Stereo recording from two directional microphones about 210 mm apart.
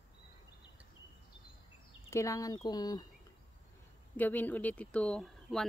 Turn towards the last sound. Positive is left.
turn(degrees=0)  # may be behind; listen again after turning